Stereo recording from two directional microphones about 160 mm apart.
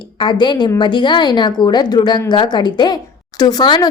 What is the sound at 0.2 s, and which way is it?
A woman's voice, 30° left (ahead or behind).